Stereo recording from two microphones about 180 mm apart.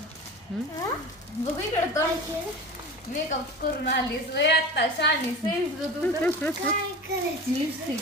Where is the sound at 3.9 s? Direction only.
70° left (ahead or behind).